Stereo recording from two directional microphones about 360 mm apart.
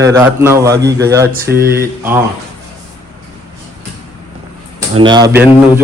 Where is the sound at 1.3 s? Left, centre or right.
Right.